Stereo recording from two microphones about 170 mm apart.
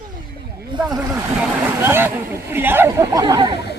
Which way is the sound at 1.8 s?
10° right (ahead or behind).